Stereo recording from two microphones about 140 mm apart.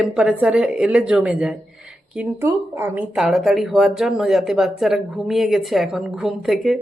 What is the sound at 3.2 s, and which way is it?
Speech, centre (ahead or behind).